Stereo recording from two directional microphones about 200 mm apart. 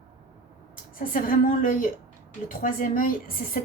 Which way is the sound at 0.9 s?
45° left (ahead or behind).